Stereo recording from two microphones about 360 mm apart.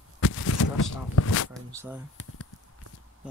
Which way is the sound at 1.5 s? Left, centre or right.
Centre.